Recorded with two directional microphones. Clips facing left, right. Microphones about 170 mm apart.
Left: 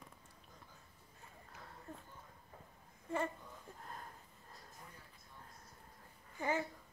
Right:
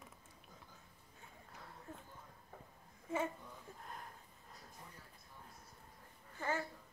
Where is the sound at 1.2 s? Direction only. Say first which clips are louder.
Even; centre (ahead or behind).